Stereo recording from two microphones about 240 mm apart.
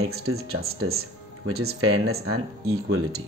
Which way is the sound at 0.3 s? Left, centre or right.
Right.